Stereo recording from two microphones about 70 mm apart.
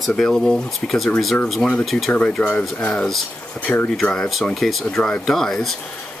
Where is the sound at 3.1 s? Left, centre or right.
Centre.